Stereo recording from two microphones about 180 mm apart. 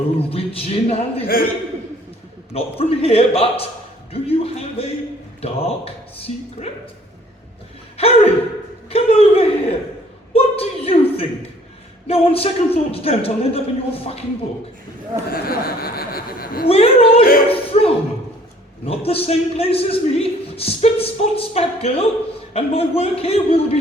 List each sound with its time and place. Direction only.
0.2 s a man's voice: 30° left (ahead or behind)
1.3 s a man's voice: 55° left (ahead or behind)
2.5 s a man's voice: 35° left (ahead or behind)
7.9 s a man's voice: 35° left (ahead or behind)
10.3 s a sound: 35° left (ahead or behind)
12.0 s a man's voice: 35° left (ahead or behind)
15.3 s speech: 55° left (ahead or behind)
16.6 s a woman's voice: 35° left (ahead or behind)
17.5 s a sound: 30° left (ahead or behind)
18.9 s a man's voice: 35° left (ahead or behind)